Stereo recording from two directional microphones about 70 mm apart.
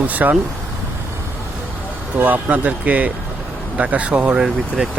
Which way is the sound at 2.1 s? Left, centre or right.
Right.